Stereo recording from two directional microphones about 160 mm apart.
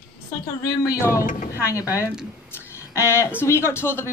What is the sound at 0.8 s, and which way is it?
A woman's voice, 20° left (ahead or behind).